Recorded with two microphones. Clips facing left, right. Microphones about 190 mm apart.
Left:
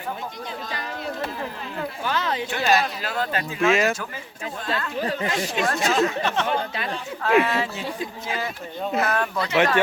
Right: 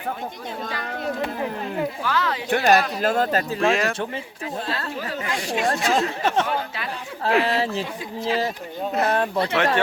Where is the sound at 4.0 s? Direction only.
30° right (ahead or behind).